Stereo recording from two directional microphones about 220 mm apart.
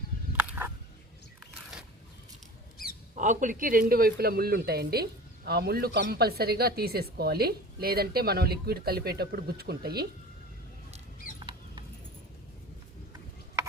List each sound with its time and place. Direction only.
3.2 s a woman's voice: 35° right (ahead or behind)
11.3 s rodents: 20° right (ahead or behind)